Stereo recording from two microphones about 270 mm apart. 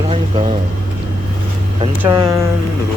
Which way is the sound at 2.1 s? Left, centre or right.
Centre.